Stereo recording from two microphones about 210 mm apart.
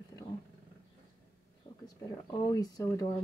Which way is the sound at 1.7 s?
15° left (ahead or behind).